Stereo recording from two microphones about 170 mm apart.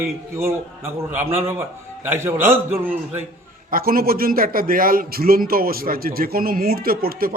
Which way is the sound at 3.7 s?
60° right (ahead or behind).